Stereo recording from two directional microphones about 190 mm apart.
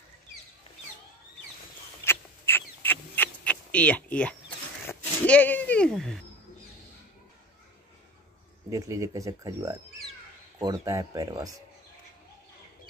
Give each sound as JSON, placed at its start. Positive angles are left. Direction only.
{"t": 2.0, "sound": "a sound", "side_deg": 10}
{"t": 4.8, "sound": "speech", "side_deg": 10}
{"t": 8.6, "sound": "speech", "side_deg": -15}